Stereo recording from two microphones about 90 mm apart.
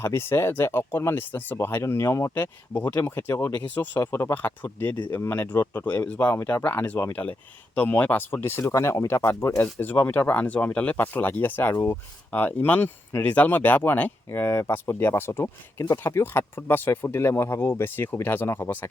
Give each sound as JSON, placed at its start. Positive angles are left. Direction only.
{"t": 0.0, "sound": "speech", "side_deg": 25}
{"t": 2.3, "sound": "speech", "side_deg": 20}